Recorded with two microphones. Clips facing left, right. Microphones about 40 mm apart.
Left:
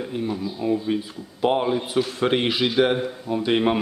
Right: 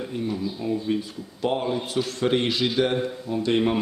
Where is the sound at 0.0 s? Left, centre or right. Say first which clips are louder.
Left 1 dB; centre.